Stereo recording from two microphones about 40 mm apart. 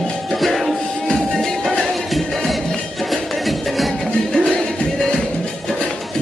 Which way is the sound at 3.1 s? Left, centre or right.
Centre.